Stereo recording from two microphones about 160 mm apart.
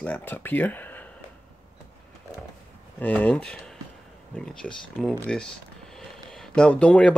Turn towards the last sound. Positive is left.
turn(degrees=5)  # may be behind; listen again after turning